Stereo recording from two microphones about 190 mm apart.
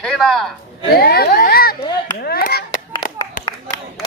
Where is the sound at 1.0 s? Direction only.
55° left (ahead or behind).